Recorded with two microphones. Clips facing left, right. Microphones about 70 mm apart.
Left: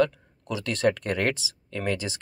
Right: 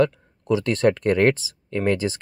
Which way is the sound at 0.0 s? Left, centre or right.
Right.